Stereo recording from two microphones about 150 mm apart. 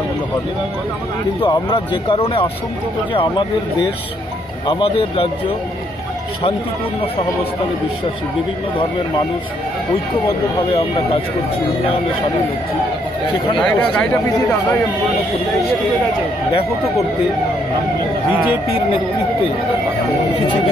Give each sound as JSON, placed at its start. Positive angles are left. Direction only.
{"t": 1.4, "sound": "speech", "side_deg": 35}
{"t": 4.6, "sound": "speech", "side_deg": 35}
{"t": 13.6, "sound": "speech", "side_deg": 5}
{"t": 20.4, "sound": "speech", "side_deg": 30}